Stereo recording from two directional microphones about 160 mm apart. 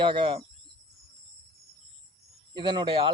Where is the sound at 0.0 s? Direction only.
30° right (ahead or behind).